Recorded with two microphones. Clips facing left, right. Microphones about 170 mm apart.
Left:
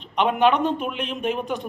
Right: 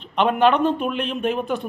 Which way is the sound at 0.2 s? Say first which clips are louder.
Right 2 dB; 15° left (ahead or behind).